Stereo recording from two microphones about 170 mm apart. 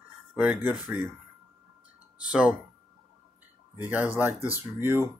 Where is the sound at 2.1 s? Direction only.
5° right (ahead or behind).